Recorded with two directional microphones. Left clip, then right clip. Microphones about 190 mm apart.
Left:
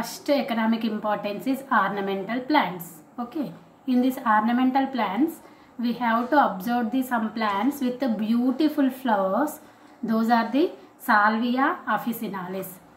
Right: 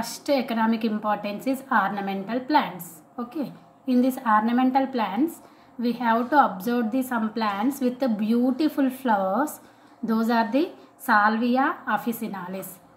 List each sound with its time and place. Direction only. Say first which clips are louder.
0.0 s a woman's voice: even; 40° right (ahead or behind)